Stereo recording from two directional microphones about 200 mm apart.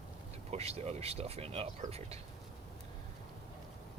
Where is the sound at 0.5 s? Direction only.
30° right (ahead or behind).